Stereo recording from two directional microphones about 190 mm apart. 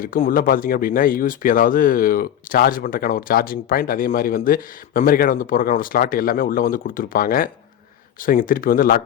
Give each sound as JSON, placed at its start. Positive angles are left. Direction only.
{"t": 0.0, "sound": "speech", "side_deg": 45}